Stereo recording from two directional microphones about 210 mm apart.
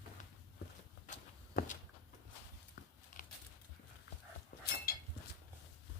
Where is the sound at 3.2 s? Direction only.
35° left (ahead or behind).